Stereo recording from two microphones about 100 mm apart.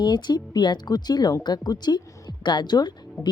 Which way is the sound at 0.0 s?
45° left (ahead or behind).